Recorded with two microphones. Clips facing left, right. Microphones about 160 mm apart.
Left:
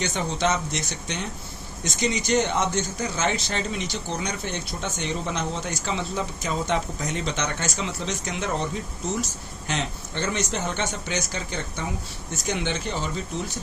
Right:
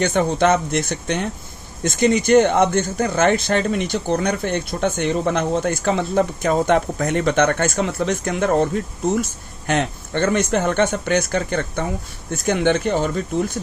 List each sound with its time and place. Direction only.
0.0 s speech: 55° right (ahead or behind)